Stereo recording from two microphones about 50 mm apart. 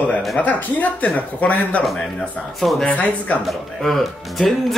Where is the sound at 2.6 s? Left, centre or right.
Centre.